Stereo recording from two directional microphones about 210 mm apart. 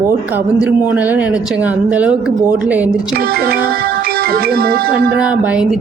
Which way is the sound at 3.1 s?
45° right (ahead or behind).